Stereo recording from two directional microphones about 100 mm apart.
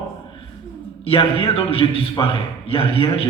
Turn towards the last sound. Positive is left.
turn(degrees=65)  # may be behind; listen again after turning